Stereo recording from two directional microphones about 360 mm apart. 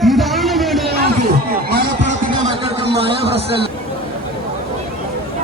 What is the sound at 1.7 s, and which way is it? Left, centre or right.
Music, right.